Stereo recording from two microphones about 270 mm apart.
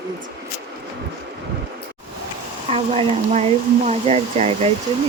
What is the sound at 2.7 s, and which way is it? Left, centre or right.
Speech, right.